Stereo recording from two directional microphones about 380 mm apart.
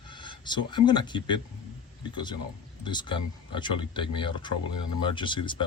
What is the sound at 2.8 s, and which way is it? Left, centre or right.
Speech, centre.